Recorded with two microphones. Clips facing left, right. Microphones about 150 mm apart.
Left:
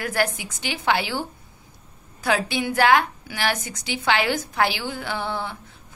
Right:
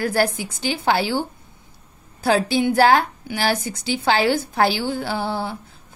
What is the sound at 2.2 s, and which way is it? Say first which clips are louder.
A woman's voice: right 5 dB; 30° right (ahead or behind).